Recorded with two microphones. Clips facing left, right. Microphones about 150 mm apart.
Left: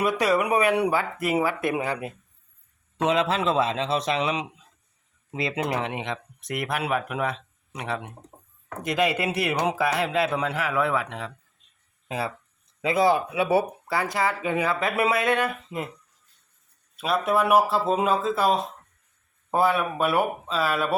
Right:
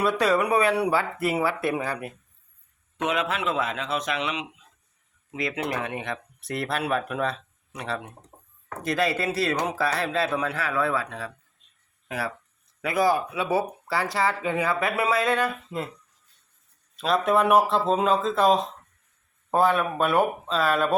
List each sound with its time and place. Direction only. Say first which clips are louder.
0.0 s a man's voice: even; 15° left (ahead or behind)
17.0 s a man's voice: right 1 dB; 5° left (ahead or behind)